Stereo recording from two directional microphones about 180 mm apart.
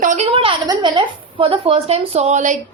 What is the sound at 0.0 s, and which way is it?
A woman's voice, 40° right (ahead or behind).